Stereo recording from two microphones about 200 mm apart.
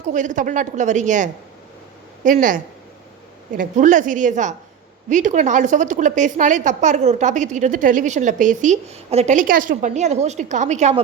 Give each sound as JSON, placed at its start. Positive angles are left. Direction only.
{"t": 0.1, "sound": "a woman's voice", "side_deg": -40}
{"t": 3.6, "sound": "a woman's voice", "side_deg": -40}